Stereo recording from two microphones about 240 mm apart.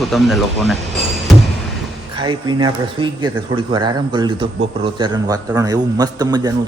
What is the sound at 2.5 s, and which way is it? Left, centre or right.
A man's voice, centre.